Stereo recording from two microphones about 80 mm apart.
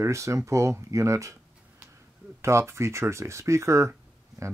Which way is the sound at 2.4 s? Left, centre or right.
Right.